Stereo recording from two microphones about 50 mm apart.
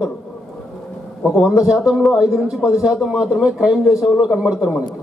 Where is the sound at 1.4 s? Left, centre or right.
Centre.